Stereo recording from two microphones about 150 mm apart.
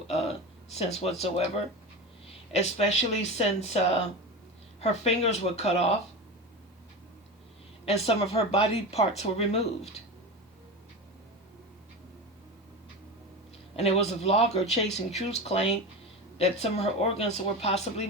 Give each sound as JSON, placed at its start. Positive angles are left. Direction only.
{"t": 0.7, "sound": "speech", "side_deg": 45}
{"t": 7.9, "sound": "speech", "side_deg": 40}
{"t": 13.7, "sound": "speech", "side_deg": 45}